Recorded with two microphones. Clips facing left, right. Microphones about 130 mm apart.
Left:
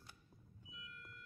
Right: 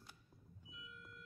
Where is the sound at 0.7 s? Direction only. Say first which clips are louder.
Even; centre (ahead or behind).